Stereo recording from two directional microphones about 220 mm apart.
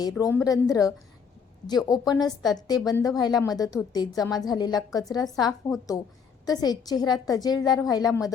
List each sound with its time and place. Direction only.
0.2 s a woman's voice: 15° left (ahead or behind)